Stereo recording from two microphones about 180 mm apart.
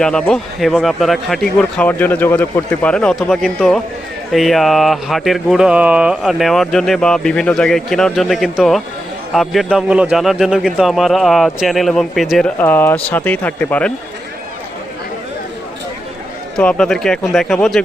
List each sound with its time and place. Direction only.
0.0 s a man's voice: 5° left (ahead or behind)
16.6 s a man's voice: 5° left (ahead or behind)